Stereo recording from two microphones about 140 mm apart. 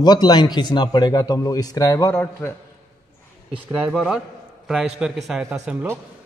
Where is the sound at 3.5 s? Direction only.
10° right (ahead or behind).